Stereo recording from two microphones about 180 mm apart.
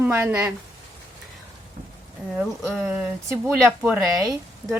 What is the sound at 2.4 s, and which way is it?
Speech, 10° right (ahead or behind).